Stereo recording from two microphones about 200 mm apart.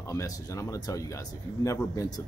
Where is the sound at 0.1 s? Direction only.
15° left (ahead or behind).